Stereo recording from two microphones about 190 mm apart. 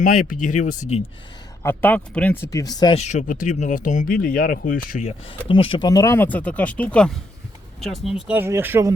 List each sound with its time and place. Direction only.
0.0 s speech: 45° left (ahead or behind)
1.6 s speech: 10° left (ahead or behind)
2.9 s speech: 35° left (ahead or behind)
5.3 s speech: 25° left (ahead or behind); by 8.9 s 15° right (ahead or behind)